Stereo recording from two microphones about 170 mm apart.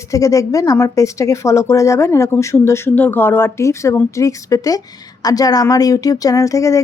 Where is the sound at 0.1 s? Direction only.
20° left (ahead or behind).